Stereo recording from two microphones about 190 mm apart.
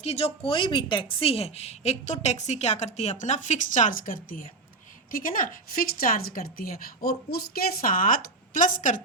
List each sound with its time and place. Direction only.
0.0 s a woman's voice: 30° left (ahead or behind)